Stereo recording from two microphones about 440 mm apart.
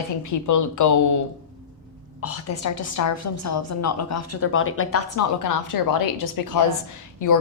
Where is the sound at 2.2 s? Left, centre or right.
Left.